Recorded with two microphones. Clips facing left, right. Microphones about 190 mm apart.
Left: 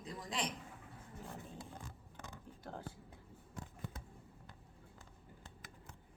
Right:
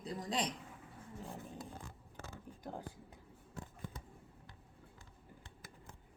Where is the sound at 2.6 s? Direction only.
15° right (ahead or behind).